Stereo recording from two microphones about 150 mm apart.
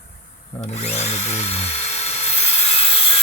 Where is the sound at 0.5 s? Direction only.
45° left (ahead or behind).